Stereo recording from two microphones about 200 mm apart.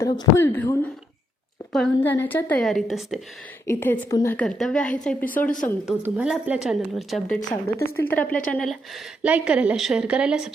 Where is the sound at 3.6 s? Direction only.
10° left (ahead or behind).